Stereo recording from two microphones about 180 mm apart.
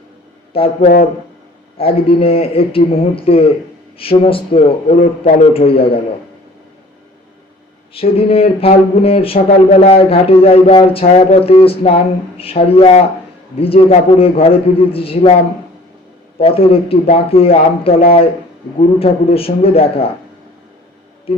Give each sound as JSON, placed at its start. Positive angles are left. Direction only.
{"t": 0.5, "sound": "a man's voice", "side_deg": 30}
{"t": 8.1, "sound": "a man's voice", "side_deg": 30}
{"t": 16.4, "sound": "a man's voice", "side_deg": 30}